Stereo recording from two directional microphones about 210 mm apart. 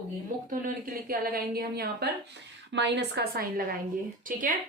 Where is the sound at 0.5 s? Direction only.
45° right (ahead or behind).